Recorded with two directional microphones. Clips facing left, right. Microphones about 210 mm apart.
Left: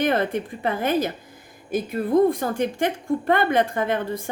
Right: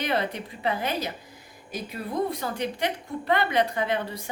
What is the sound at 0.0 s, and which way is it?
A woman's voice, 50° left (ahead or behind).